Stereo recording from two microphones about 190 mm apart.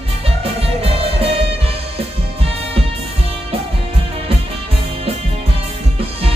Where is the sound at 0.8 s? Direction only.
30° right (ahead or behind).